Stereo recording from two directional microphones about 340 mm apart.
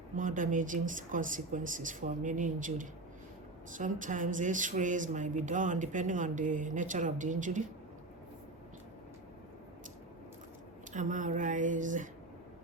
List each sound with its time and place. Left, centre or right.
0.2 s speech: right
10.9 s speech: right